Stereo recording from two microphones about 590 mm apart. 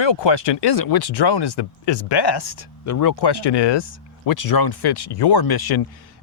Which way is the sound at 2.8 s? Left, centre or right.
Left.